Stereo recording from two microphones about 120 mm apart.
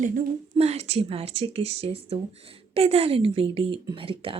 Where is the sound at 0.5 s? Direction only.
65° right (ahead or behind).